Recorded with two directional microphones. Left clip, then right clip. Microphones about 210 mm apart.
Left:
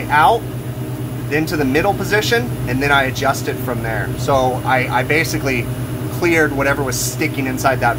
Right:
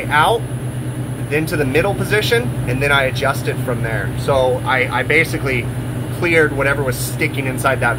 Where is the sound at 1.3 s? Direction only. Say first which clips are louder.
Even; 15° left (ahead or behind).